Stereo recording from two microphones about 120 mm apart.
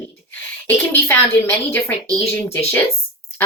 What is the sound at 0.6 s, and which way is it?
A woman's voice, 20° left (ahead or behind).